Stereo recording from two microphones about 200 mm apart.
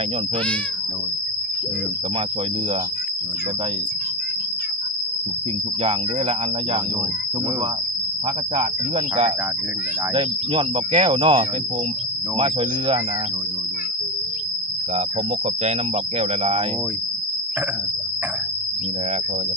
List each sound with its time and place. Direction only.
5.8 s cricket: 30° right (ahead or behind)
10.2 s speech: 25° right (ahead or behind)
16.1 s cricket: 30° right (ahead or behind)